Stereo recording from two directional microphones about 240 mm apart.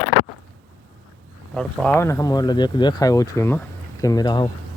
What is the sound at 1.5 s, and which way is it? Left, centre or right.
Speech, centre.